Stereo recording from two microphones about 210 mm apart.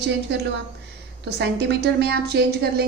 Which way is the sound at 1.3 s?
55° right (ahead or behind).